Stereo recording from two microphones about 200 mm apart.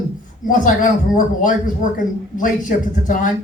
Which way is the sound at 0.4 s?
40° left (ahead or behind).